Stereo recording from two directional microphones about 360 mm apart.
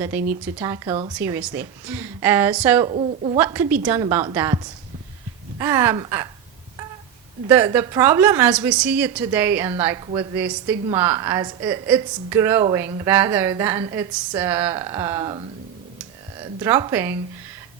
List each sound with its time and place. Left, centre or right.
0.1 s a woman's voice: centre
2.9 s a woman's voice: centre
3.3 s a woman's voice: centre
7.4 s a woman's voice: centre
16.6 s a woman's voice: centre